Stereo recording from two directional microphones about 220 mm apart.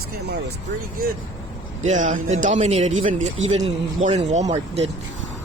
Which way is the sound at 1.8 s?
35° right (ahead or behind).